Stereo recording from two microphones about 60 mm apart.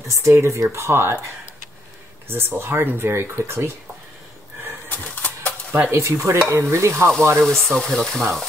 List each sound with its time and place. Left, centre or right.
0.1 s speech: right
4.8 s bird: left
5.7 s speech: right
7.4 s speech: centre